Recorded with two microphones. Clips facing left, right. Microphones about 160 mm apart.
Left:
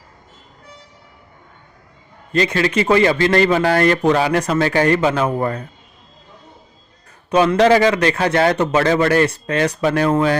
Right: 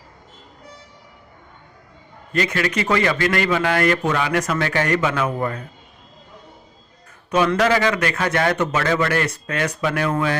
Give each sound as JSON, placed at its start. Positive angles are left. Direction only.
{"t": 2.3, "sound": "a man's voice", "side_deg": 25}
{"t": 7.3, "sound": "a man's voice", "side_deg": 30}